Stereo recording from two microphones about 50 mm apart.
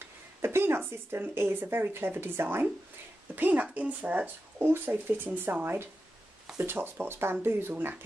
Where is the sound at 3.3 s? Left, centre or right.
Right.